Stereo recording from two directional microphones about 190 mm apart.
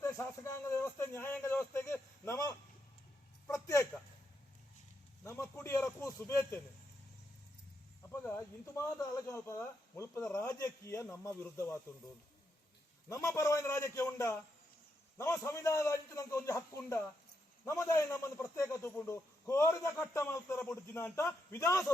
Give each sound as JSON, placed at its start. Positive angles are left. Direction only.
{"t": 0.0, "sound": "a man's voice", "side_deg": 15}
{"t": 3.4, "sound": "a sound", "side_deg": 15}
{"t": 5.2, "sound": "a man's voice", "side_deg": 15}
{"t": 8.2, "sound": "a man's voice", "side_deg": 15}
{"t": 13.1, "sound": "a man's voice", "side_deg": 15}